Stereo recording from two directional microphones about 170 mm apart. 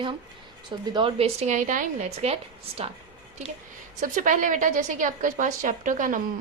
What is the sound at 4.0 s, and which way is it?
A woman's voice, 50° right (ahead or behind).